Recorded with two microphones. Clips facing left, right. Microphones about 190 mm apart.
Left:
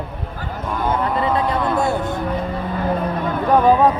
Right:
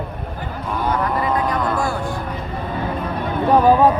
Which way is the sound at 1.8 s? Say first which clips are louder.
Left 3 dB; 25° left (ahead or behind).